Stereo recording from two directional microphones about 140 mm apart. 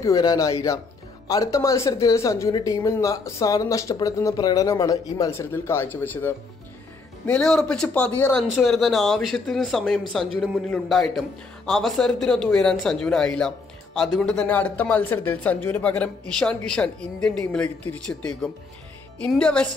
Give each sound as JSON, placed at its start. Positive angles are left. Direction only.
{"t": 0.0, "sound": "speech", "side_deg": 25}
{"t": 8.5, "sound": "a man's voice", "side_deg": 0}
{"t": 19.1, "sound": "speech", "side_deg": 5}